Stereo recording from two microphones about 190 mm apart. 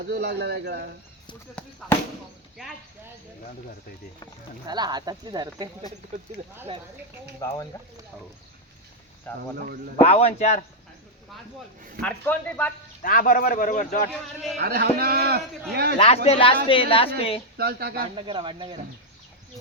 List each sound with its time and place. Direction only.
0.0 s a man's voice: 65° right (ahead or behind)
1.6 s speech: 5° left (ahead or behind)
4.6 s speech: 20° right (ahead or behind)
7.4 s speech: 15° left (ahead or behind)
9.3 s speech: 10° left (ahead or behind)
10.0 s a man's voice: 30° left (ahead or behind)
12.0 s speech: 5° left (ahead or behind)
13.0 s speech: 50° left (ahead or behind)
14.6 s a man's voice: 55° right (ahead or behind)
16.0 s speech: 35° left (ahead or behind)
17.6 s speech: 55° right (ahead or behind)
18.1 s speech: 30° right (ahead or behind)